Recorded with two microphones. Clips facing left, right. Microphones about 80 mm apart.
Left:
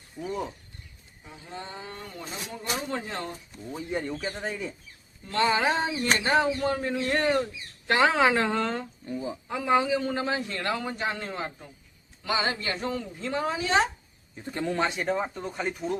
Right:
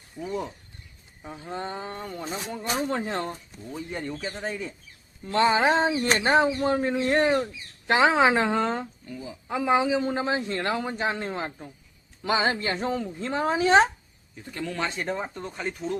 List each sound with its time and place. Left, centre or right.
0.2 s speech: centre
1.2 s speech: right
3.7 s speech: centre
5.2 s speech: right
9.0 s speech: left
9.5 s speech: centre; by 13.8 s right
14.3 s speech: left
14.9 s speech: centre